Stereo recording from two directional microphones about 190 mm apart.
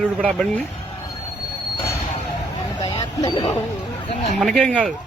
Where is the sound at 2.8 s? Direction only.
20° left (ahead or behind).